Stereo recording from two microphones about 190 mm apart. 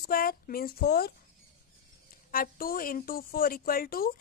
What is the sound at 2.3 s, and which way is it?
A woman's voice, 50° left (ahead or behind).